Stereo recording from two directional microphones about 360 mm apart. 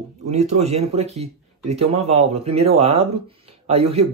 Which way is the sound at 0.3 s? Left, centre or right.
Centre.